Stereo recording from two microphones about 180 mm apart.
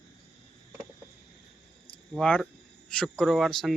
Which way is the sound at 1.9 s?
5° left (ahead or behind).